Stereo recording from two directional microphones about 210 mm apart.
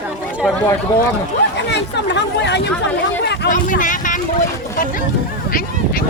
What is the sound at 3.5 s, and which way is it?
Speech, 40° left (ahead or behind).